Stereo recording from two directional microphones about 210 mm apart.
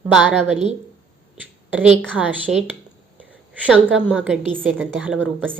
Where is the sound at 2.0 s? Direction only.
5° left (ahead or behind).